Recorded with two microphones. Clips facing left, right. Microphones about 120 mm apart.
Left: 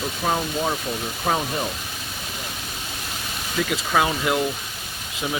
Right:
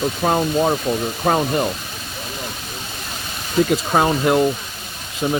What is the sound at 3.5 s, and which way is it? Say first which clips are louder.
Speech: right 5 dB; 40° right (ahead or behind).